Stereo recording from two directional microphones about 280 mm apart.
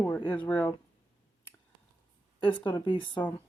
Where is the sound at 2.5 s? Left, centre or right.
Centre.